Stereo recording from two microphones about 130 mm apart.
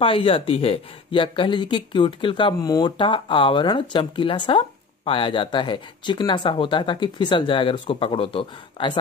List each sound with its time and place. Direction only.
0.0 s speech: 45° left (ahead or behind)